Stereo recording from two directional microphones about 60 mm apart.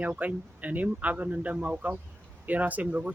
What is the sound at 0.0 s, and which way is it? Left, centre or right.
Speech, right.